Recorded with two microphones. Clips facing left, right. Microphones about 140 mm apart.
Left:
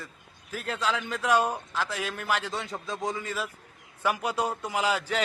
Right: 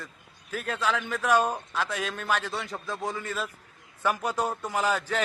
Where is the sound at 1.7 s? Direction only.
Centre (ahead or behind).